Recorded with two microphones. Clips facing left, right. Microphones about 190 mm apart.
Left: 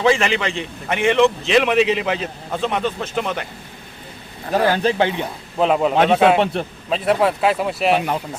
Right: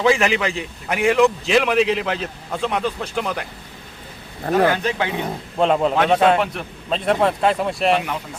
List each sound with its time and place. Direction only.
0.0 s a man's voice: centre (ahead or behind)
4.5 s speech: 30° left (ahead or behind)
5.5 s a man's voice: 5° left (ahead or behind)
6.4 s a man's voice: 30° left (ahead or behind)
6.9 s a man's voice: 5° left (ahead or behind)